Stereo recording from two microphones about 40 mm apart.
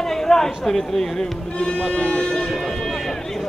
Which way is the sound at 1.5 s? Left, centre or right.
Left.